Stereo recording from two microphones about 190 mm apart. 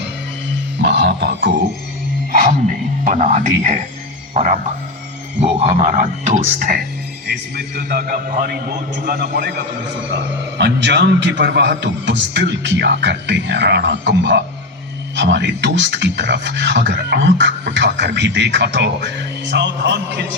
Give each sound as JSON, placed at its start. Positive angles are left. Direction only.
{"t": 0.8, "sound": "speech", "side_deg": -65}
{"t": 2.3, "sound": "music", "side_deg": -45}
{"t": 3.0, "sound": "a man's voice", "side_deg": -40}
{"t": 10.6, "sound": "speech", "side_deg": -70}